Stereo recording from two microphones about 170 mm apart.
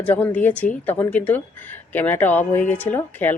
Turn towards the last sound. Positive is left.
turn(degrees=10)  # may be behind; listen again after turning